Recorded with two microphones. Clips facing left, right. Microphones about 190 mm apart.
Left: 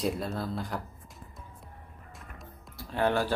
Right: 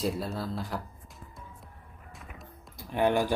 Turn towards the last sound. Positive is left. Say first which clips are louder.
# right 2 dB
turn(degrees=-15)  # may be behind; listen again after turning